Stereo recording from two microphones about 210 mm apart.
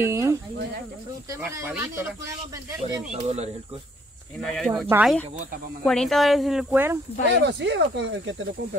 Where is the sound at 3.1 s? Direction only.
30° right (ahead or behind).